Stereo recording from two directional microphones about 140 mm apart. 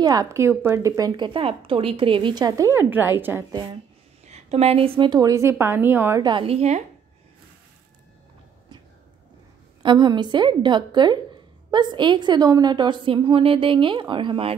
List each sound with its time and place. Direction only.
0.0 s speech: 25° right (ahead or behind)
4.3 s speech: 50° right (ahead or behind); by 6.2 s 15° right (ahead or behind)
6.2 s a woman's voice: 40° right (ahead or behind)
9.8 s a woman's voice: 35° right (ahead or behind)